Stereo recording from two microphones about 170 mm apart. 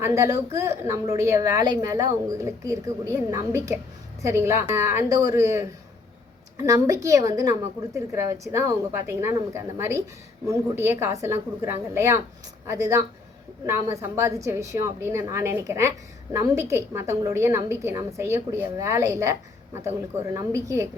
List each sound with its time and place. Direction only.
0.0 s a woman's voice: 15° right (ahead or behind)
6.7 s a woman's voice: 15° right (ahead or behind)